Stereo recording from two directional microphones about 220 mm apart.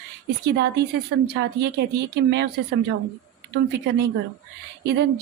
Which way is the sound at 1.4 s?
50° right (ahead or behind).